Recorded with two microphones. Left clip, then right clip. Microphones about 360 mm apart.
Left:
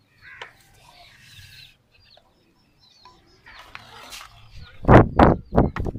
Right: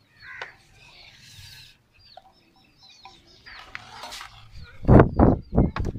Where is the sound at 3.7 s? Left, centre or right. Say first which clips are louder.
Right 2 dB; centre.